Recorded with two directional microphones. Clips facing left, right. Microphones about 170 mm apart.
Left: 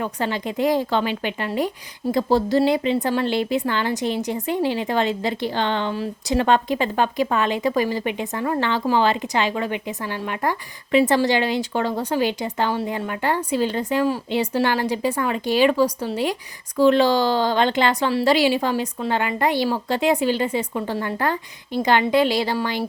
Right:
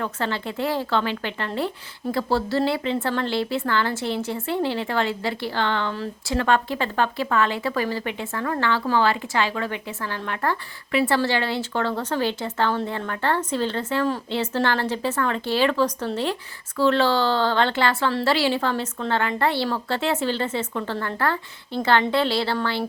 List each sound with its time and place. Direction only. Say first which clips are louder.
0.0 s speech: left 2 dB; 15° left (ahead or behind)